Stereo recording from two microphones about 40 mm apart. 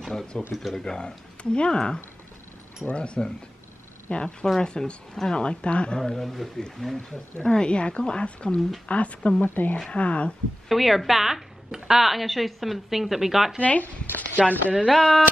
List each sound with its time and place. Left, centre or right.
0.3 s speech: left
5.9 s a woman's voice: centre
6.8 s speech: centre
8.5 s speech: centre
8.8 s speech: left
9.4 s speech: left
9.8 s speech: left
10.7 s a woman's voice: centre
13.6 s speech: left
14.9 s a woman's voice: centre